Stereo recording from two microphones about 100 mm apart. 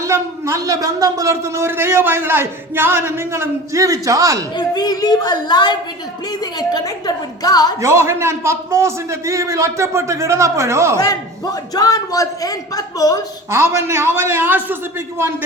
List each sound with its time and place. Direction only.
0.0 s a man's voice: 30° right (ahead or behind)
4.5 s a woman's voice: 40° left (ahead or behind)
7.8 s a man's voice: 30° right (ahead or behind)
10.9 s a man's voice: 40° left (ahead or behind)
13.5 s a man's voice: 25° right (ahead or behind)